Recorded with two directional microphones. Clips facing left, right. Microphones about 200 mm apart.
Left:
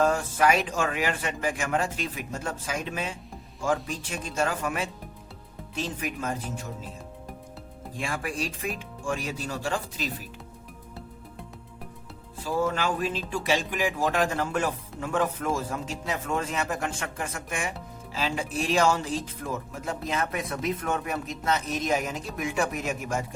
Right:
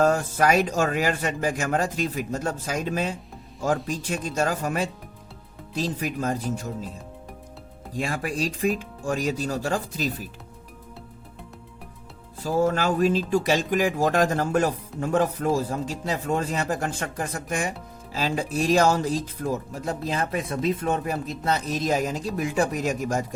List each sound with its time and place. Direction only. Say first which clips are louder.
0.0 s speech: right 2 dB; 40° right (ahead or behind)
7.9 s speech: right 4 dB; 40° right (ahead or behind)
12.5 s speech: right 4 dB; 40° right (ahead or behind)